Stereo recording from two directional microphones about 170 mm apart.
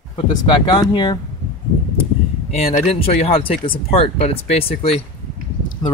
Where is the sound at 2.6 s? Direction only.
35° left (ahead or behind).